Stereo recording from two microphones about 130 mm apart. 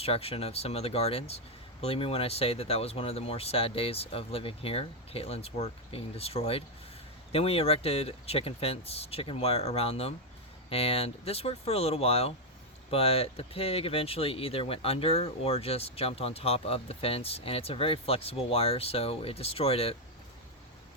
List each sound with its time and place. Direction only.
0.0 s speech: 50° left (ahead or behind)